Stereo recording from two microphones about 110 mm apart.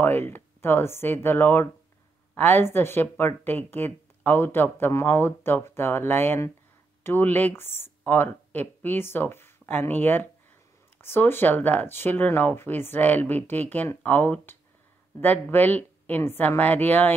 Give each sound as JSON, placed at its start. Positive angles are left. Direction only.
{"t": 0.0, "sound": "speech", "side_deg": 20}